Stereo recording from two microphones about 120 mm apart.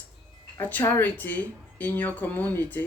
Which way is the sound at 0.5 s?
20° left (ahead or behind).